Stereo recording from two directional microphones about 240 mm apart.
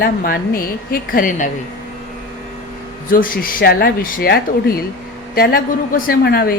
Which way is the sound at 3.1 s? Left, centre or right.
Left.